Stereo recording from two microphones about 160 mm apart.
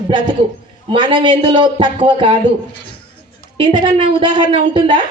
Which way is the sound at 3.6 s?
30° right (ahead or behind).